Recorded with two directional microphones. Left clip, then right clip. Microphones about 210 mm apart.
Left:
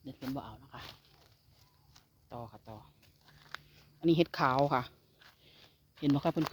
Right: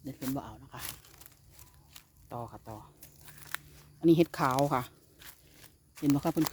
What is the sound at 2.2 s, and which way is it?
Speech, 20° right (ahead or behind).